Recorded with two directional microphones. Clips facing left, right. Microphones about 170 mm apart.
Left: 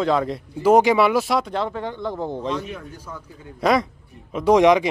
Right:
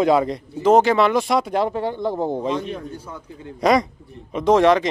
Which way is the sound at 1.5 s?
15° right (ahead or behind).